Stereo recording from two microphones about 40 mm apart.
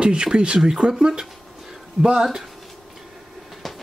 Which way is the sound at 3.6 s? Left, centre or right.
Centre.